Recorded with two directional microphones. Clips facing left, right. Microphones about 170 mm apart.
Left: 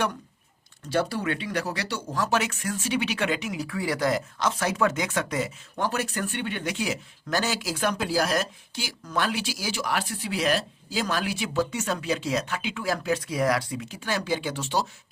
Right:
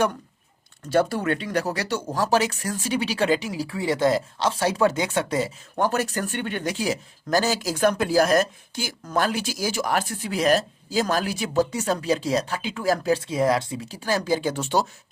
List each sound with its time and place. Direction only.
0.9 s speech: 50° right (ahead or behind); by 5.5 s 30° right (ahead or behind)
5.7 s speech: 45° right (ahead or behind)